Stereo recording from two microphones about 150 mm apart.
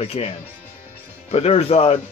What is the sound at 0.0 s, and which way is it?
Speech, 40° left (ahead or behind).